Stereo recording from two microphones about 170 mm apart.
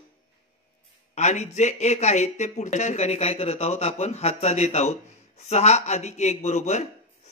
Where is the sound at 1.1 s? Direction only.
45° left (ahead or behind).